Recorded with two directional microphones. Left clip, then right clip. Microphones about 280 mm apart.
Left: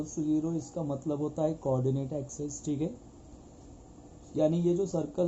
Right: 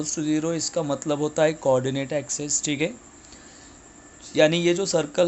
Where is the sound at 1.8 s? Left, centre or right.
Right.